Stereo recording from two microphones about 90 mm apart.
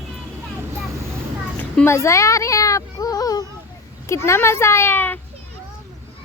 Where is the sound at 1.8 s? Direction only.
35° left (ahead or behind).